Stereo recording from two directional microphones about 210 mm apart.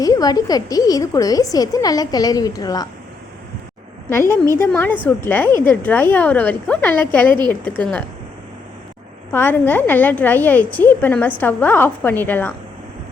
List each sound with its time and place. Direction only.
0.0 s speech: 15° left (ahead or behind)
4.1 s speech: 15° left (ahead or behind)
9.3 s speech: 10° left (ahead or behind)